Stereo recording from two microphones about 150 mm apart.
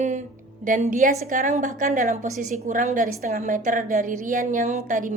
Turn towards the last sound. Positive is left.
turn(degrees=-60)  # may be behind; listen again after turning